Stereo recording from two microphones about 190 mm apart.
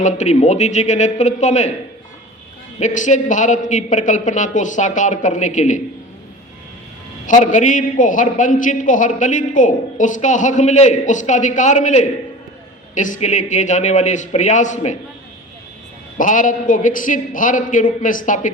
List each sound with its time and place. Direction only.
0.0 s a man's voice: 40° left (ahead or behind)
2.7 s a man's voice: 40° left (ahead or behind)
7.3 s a man's voice: 40° left (ahead or behind)
16.1 s a man's voice: 45° left (ahead or behind)